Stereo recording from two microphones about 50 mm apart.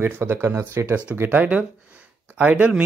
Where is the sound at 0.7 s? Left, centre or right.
Right.